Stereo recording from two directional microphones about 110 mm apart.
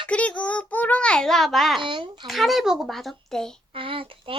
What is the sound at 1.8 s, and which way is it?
Speech, 45° right (ahead or behind).